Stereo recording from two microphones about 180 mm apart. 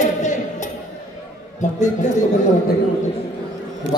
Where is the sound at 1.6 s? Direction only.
40° left (ahead or behind).